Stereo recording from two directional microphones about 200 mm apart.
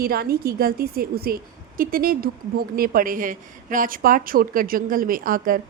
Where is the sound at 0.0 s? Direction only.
50° right (ahead or behind).